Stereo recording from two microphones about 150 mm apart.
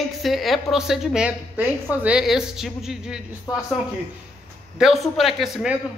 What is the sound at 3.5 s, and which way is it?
Speech, 25° left (ahead or behind).